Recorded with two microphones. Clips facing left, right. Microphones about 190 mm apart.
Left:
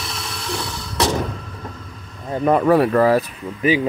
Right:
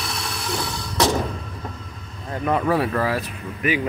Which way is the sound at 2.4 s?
50° left (ahead or behind).